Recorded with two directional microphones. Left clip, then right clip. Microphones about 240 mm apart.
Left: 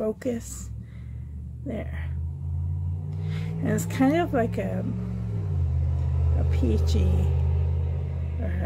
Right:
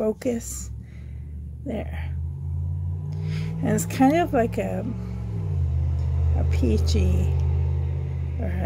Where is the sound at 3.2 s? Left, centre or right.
Right.